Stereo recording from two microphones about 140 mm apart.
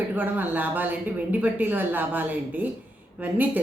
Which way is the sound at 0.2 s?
15° right (ahead or behind).